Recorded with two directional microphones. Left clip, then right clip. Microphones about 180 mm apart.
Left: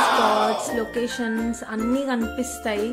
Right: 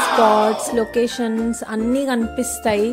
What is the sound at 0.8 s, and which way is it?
Speech, 35° right (ahead or behind).